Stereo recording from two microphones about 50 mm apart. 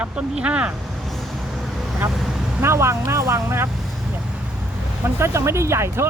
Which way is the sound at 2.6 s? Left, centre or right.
Right.